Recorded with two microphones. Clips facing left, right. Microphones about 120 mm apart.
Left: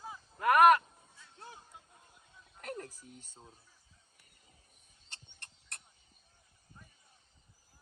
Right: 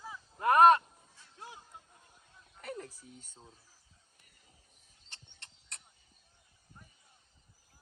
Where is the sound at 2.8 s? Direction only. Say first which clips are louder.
Even; 45° left (ahead or behind).